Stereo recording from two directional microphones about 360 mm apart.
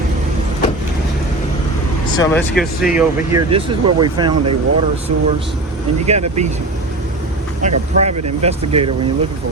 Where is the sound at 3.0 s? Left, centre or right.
Centre.